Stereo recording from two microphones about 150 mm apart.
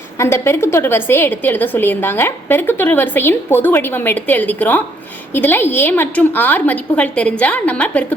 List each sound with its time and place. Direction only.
0.2 s a woman's voice: 15° left (ahead or behind)